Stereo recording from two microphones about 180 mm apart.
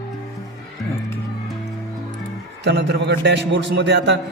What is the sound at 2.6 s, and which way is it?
A man's voice, 70° right (ahead or behind).